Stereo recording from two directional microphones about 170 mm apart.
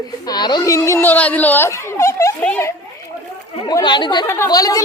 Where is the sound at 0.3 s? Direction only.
25° left (ahead or behind).